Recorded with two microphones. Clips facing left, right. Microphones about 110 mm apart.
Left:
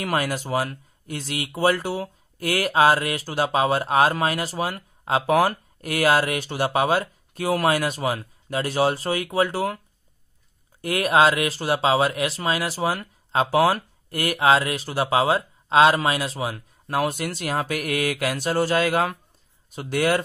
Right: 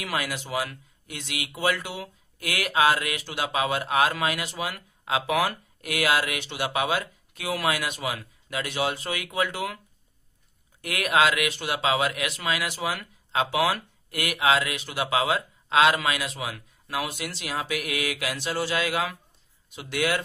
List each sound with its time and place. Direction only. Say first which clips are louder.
0.0 s speech: left 6 dB; 45° left (ahead or behind)
10.8 s speech: left 4 dB; 35° left (ahead or behind)